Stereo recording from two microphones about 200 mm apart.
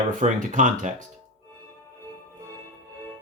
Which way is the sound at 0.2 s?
40° right (ahead or behind).